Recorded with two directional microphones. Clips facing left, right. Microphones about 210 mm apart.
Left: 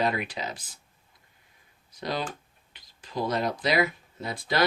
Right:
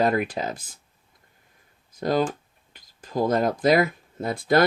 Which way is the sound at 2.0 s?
50° right (ahead or behind).